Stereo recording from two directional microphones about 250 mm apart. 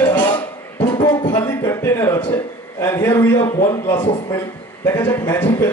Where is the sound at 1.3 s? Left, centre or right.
Centre.